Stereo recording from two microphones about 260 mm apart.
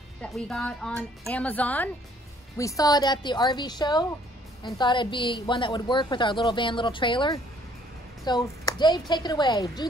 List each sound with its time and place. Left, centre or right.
0.2 s a woman's voice: centre